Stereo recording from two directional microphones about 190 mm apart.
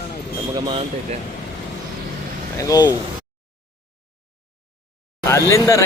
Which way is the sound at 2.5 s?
20° left (ahead or behind).